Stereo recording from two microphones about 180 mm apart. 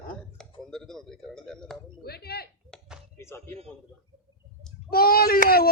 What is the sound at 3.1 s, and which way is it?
Speech, 15° left (ahead or behind).